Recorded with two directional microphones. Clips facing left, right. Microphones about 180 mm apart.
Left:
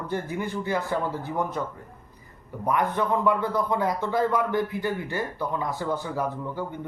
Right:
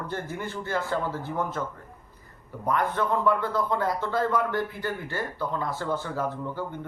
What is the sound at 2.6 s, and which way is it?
A man's voice, 15° left (ahead or behind).